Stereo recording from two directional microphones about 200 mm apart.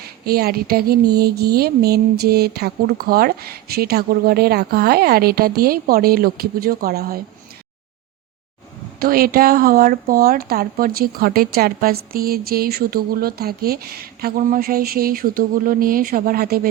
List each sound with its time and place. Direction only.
0.0 s speech: 50° right (ahead or behind)
9.0 s speech: 50° right (ahead or behind)